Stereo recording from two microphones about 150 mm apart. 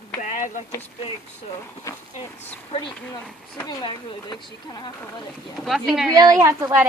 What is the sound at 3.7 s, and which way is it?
Speech, 30° left (ahead or behind).